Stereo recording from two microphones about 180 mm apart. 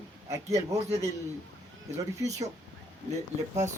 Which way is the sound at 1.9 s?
15° right (ahead or behind).